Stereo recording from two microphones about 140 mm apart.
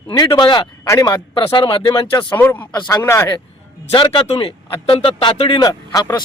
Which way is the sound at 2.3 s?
15° left (ahead or behind).